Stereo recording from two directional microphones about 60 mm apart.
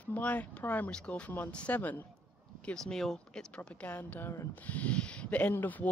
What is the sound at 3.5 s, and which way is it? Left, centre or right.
Speech, left.